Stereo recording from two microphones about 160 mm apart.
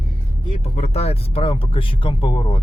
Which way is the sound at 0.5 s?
40° left (ahead or behind).